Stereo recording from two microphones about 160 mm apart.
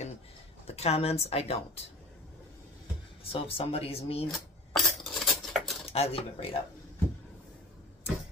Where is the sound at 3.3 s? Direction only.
35° left (ahead or behind).